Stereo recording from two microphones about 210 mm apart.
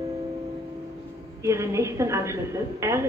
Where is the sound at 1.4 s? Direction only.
15° right (ahead or behind).